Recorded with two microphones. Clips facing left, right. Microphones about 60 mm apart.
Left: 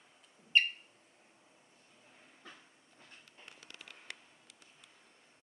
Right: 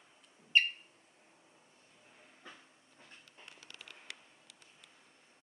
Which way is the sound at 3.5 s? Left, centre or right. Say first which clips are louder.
Even; left.